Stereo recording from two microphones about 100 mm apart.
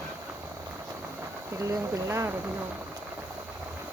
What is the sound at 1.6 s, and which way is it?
Speech, 35° right (ahead or behind).